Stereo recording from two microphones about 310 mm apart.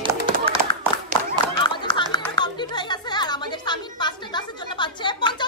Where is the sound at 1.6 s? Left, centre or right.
Centre.